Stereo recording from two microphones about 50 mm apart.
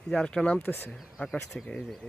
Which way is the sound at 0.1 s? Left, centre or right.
Centre.